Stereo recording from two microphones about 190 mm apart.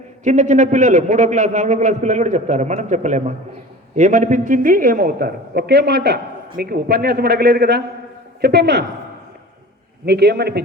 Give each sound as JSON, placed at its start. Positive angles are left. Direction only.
{"t": 0.3, "sound": "a man's voice", "side_deg": -40}
{"t": 10.1, "sound": "a man's voice", "side_deg": -60}